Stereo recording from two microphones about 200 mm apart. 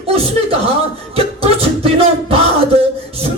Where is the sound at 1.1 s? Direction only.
30° right (ahead or behind).